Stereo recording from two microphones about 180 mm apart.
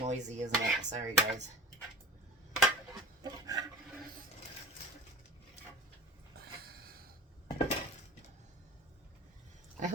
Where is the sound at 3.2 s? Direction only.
20° right (ahead or behind).